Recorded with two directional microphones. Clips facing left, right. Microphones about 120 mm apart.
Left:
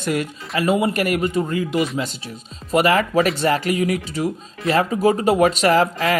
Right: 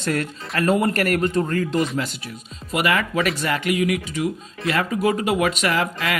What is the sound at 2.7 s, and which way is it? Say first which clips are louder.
A man's voice: left 5 dB; 35° left (ahead or behind).